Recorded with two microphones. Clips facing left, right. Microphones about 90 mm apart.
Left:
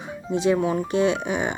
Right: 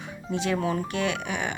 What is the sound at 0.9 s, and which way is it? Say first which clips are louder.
Speech: left 7 dB; 20° left (ahead or behind).